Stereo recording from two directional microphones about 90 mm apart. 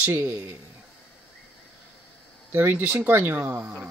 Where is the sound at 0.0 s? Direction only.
25° right (ahead or behind).